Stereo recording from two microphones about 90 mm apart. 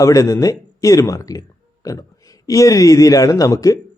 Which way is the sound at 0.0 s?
40° left (ahead or behind).